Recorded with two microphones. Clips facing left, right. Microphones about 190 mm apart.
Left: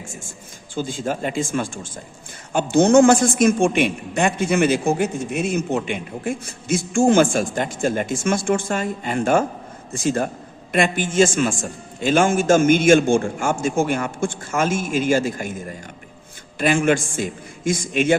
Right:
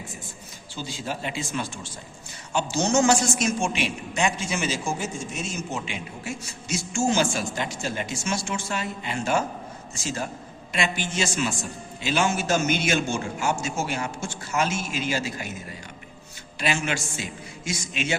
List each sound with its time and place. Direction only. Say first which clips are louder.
0.1 s a man's voice: left 3 dB; 45° left (ahead or behind)